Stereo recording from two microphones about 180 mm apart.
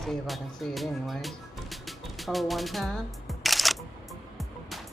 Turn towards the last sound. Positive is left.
turn(degrees=0)  # may be behind; listen again after turning